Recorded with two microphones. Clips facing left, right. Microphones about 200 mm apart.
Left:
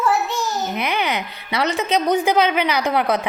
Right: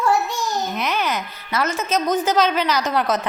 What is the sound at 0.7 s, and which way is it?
A woman's voice, 60° left (ahead or behind).